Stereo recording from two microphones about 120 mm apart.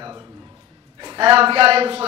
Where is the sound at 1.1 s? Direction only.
45° right (ahead or behind).